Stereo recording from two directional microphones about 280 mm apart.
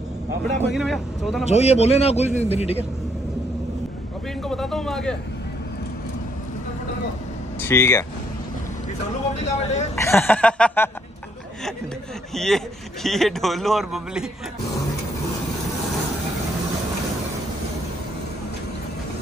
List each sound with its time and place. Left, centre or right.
0.6 s a man's voice: centre
1.5 s a man's voice: left
4.5 s a man's voice: centre
7.6 s a sound: centre
9.4 s a man's voice: left
9.9 s a sound: centre
12.4 s a man's voice: centre